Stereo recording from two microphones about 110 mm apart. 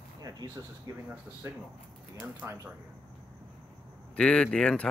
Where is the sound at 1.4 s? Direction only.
20° right (ahead or behind).